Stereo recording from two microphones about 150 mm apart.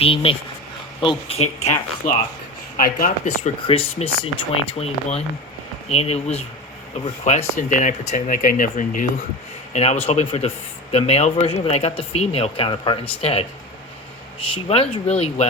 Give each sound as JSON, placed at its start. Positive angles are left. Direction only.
{"t": 0.0, "sound": "speech", "side_deg": 40}
{"t": 2.0, "sound": "speech", "side_deg": 70}
{"t": 3.7, "sound": "speech", "side_deg": 40}
{"t": 6.0, "sound": "speech", "side_deg": 45}
{"t": 14.5, "sound": "speech", "side_deg": 40}